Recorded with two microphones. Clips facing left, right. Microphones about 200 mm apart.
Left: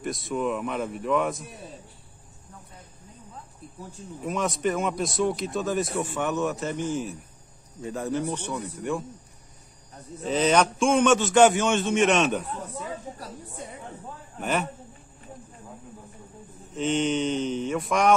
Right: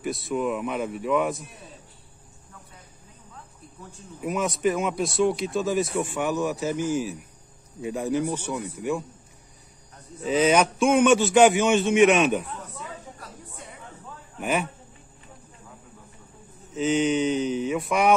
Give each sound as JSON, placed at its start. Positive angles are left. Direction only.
{"t": 0.0, "sound": "a man's voice", "side_deg": 0}
{"t": 4.2, "sound": "a man's voice", "side_deg": -5}
{"t": 10.2, "sound": "a man's voice", "side_deg": -5}
{"t": 12.5, "sound": "a sound", "side_deg": 40}
{"t": 16.7, "sound": "a man's voice", "side_deg": -5}